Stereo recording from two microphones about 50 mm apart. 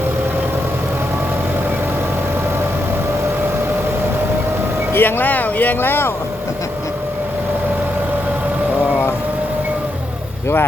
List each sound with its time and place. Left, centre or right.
4.9 s speech: left